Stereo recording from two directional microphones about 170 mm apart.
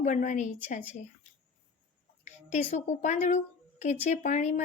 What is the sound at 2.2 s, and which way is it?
A woman's voice, 45° left (ahead or behind).